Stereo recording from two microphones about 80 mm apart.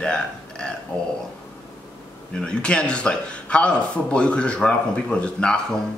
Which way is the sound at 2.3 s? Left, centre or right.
Centre.